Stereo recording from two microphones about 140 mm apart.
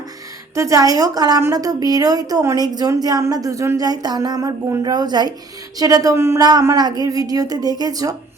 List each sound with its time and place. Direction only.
0.5 s a woman's voice: 20° right (ahead or behind)